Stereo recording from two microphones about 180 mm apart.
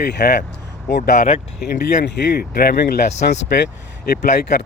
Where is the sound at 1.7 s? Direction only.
65° left (ahead or behind).